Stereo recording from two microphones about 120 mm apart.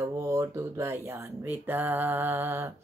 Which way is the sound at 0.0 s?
25° right (ahead or behind).